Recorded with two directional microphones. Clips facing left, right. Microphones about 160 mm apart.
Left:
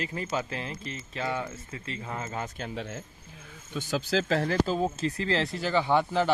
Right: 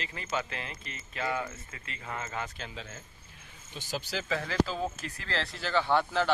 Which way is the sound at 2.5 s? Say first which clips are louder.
Left 7 dB; 50° left (ahead or behind).